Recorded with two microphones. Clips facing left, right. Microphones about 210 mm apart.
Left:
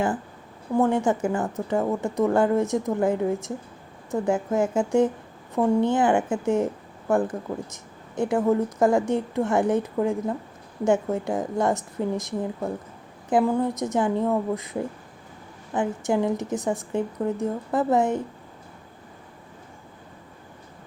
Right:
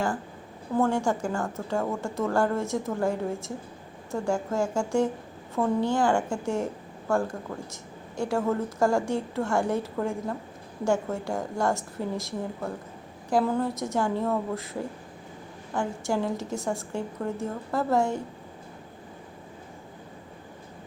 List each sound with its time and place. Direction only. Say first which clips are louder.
0.8 s a woman's voice: left 3 dB; 20° left (ahead or behind)